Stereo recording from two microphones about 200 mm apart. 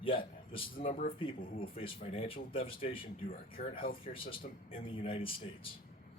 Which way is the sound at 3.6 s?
40° left (ahead or behind).